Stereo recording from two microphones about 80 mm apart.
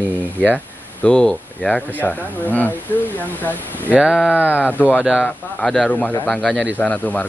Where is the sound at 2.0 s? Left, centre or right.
Left.